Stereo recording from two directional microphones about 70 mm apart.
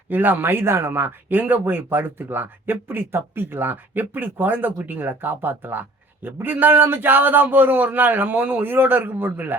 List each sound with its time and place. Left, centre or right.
0.1 s speech: right